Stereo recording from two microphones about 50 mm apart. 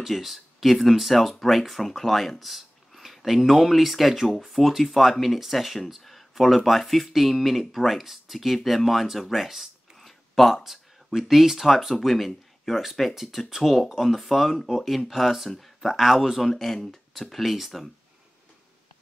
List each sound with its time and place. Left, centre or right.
0.0 s speech: centre
16.5 s speech: centre